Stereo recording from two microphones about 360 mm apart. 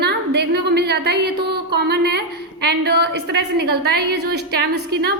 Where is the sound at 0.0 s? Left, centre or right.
Right.